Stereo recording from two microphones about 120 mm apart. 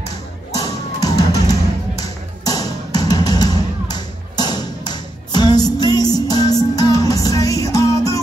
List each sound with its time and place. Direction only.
0.6 s music: 30° left (ahead or behind)